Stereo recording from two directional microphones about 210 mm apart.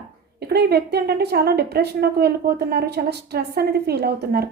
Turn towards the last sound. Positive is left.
turn(degrees=-50)  # may be behind; listen again after turning